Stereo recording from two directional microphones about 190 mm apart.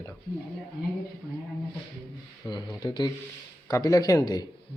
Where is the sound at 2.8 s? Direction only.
20° left (ahead or behind).